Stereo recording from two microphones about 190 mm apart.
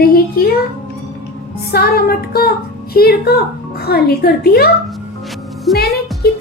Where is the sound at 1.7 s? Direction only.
55° left (ahead or behind).